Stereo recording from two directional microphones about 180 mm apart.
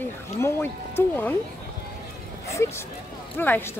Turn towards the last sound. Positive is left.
turn(degrees=10)  # may be behind; listen again after turning